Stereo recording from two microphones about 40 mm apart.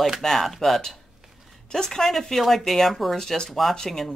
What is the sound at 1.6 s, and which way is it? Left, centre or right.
A woman's voice, centre.